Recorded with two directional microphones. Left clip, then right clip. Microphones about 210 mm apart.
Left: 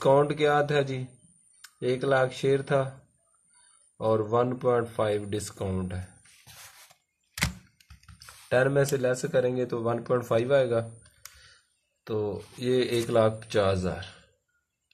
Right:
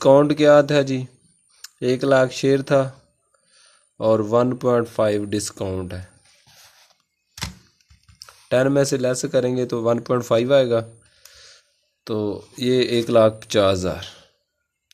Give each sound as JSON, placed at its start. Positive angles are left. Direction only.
{"t": 0.0, "sound": "speech", "side_deg": -45}
{"t": 3.9, "sound": "speech", "side_deg": -45}
{"t": 8.5, "sound": "speech", "side_deg": -45}
{"t": 12.0, "sound": "speech", "side_deg": -50}